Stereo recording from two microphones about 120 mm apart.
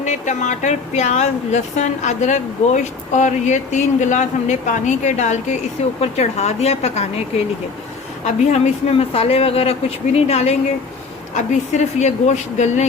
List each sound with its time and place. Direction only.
0.0 s speech: 85° left
6.0 s a woman's voice: 65° left (ahead or behind)
8.2 s a woman's voice: 70° left (ahead or behind)
11.3 s speech: 75° left (ahead or behind)